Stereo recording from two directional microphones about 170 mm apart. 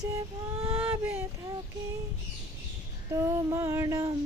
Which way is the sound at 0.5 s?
35° right (ahead or behind).